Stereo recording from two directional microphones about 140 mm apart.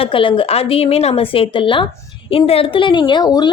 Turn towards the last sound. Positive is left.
turn(degrees=30)  # may be behind; listen again after turning